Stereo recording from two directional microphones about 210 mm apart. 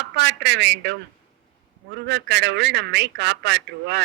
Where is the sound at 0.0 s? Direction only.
55° right (ahead or behind).